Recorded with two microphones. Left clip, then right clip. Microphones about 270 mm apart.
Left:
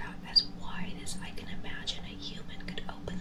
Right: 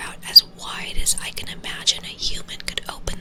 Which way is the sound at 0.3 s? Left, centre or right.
Right.